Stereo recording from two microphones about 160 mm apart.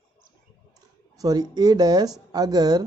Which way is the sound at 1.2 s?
25° right (ahead or behind).